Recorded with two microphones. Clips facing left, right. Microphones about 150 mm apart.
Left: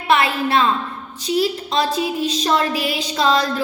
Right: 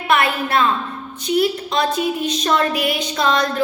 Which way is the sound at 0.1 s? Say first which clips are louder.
Left 1 dB; 25° left (ahead or behind).